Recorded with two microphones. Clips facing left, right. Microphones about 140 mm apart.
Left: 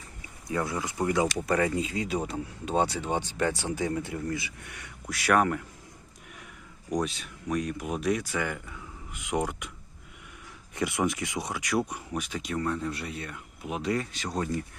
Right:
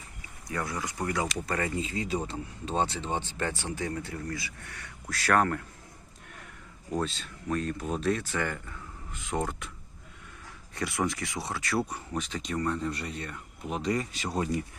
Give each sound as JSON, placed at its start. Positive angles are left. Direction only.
{"t": 0.2, "sound": "speech", "side_deg": 25}
{"t": 6.9, "sound": "speech", "side_deg": 10}
{"t": 10.8, "sound": "speech", "side_deg": 20}